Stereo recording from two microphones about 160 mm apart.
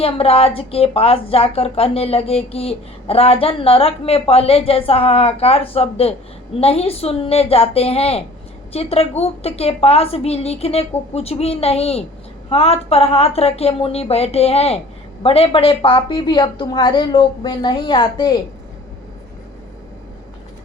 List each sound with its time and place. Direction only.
0.0 s a woman's voice: 35° left (ahead or behind)